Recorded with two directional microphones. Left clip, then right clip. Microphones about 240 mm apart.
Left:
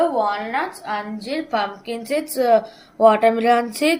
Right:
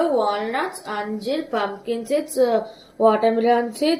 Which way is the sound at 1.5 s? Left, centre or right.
Left.